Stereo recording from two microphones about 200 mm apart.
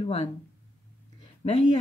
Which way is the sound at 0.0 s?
30° left (ahead or behind).